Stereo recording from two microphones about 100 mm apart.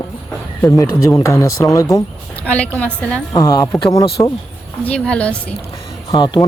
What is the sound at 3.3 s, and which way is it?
Speech, 30° left (ahead or behind).